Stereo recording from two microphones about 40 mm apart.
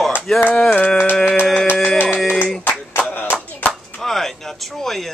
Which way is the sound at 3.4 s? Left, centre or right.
Left.